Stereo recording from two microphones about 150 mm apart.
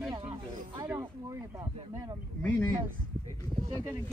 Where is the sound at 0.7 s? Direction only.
15° right (ahead or behind).